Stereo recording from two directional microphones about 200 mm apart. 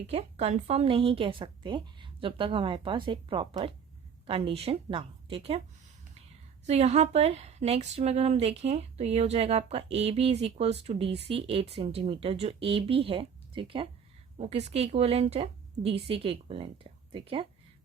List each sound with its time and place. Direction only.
0.1 s a woman's voice: 30° right (ahead or behind)
6.7 s a woman's voice: 35° right (ahead or behind)